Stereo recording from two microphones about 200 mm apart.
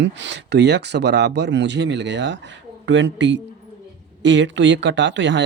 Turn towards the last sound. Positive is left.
turn(degrees=-65)  # may be behind; listen again after turning